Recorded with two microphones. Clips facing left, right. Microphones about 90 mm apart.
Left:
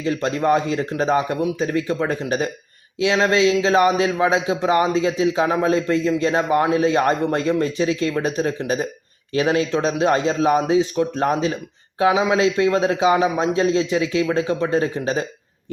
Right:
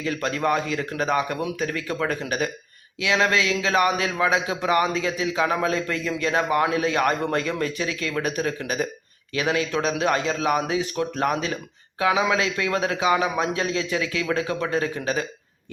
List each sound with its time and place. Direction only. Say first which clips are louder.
0.0 s a man's voice: left 4 dB; 25° left (ahead or behind)